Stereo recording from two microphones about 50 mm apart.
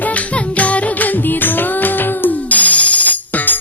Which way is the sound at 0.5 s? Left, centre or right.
Left.